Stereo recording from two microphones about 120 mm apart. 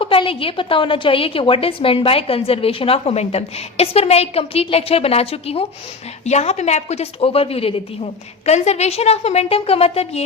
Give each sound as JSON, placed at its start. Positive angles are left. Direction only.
{"t": 0.0, "sound": "a woman's voice", "side_deg": 45}
{"t": 6.2, "sound": "a woman's voice", "side_deg": 65}
{"t": 8.4, "sound": "a woman's voice", "side_deg": 65}